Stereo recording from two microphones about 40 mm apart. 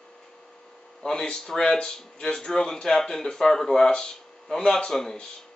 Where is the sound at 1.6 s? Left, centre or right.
Centre.